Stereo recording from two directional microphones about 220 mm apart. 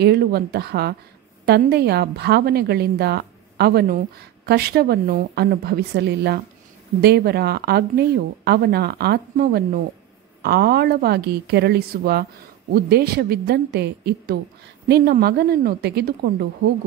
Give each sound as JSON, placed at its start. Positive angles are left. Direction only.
{"t": 0.0, "sound": "a woman's voice", "side_deg": -45}